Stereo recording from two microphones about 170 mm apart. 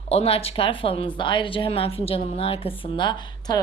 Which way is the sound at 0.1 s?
35° left (ahead or behind).